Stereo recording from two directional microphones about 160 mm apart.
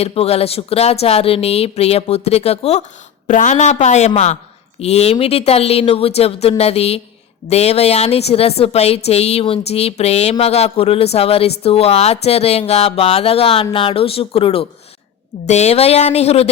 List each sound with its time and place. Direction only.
0.0 s a woman's voice: 40° left (ahead or behind)